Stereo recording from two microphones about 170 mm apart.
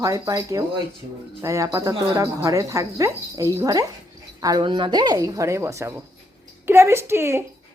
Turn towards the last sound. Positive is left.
turn(degrees=-15)  # may be behind; listen again after turning